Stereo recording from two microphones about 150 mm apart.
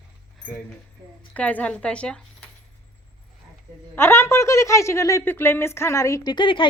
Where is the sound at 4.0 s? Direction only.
15° left (ahead or behind).